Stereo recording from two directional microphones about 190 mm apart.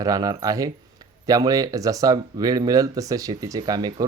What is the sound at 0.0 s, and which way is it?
Speech, 20° right (ahead or behind).